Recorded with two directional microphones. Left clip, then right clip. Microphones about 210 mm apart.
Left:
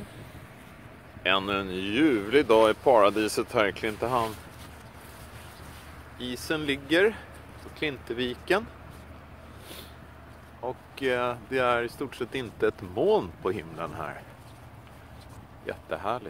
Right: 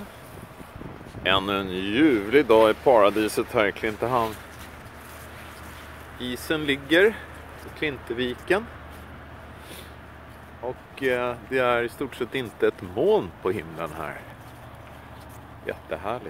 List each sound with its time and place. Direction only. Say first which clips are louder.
1.2 s speech: right 3 dB; centre (ahead or behind)
6.1 s speech: right 3 dB; 10° left (ahead or behind)
10.6 s speech: right 3 dB; 20° left (ahead or behind)
15.6 s speech: right 1 dB; 15° left (ahead or behind)